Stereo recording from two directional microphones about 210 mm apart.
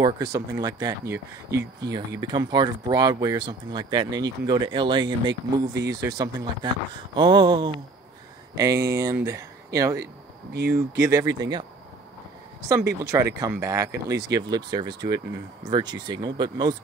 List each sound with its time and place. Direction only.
0.0 s speech: 15° right (ahead or behind)
5.2 s speech: 60° right (ahead or behind)
5.9 s speech: 15° right (ahead or behind)
12.6 s speech: 15° right (ahead or behind)